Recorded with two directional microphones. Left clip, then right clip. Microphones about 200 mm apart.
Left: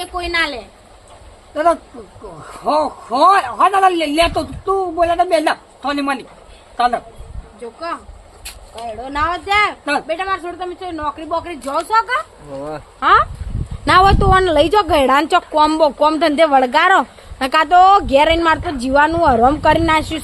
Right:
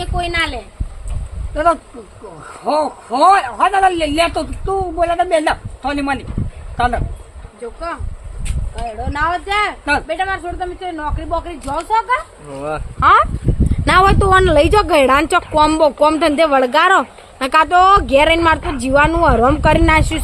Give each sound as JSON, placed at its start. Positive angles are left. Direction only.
{"t": 0.0, "sound": "a man's voice", "side_deg": 20}
{"t": 9.1, "sound": "speech", "side_deg": 20}
{"t": 12.5, "sound": "speech", "side_deg": -45}
{"t": 13.0, "sound": "speech", "side_deg": 0}